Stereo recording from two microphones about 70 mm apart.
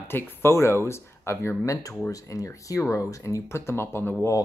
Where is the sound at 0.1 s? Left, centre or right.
Left.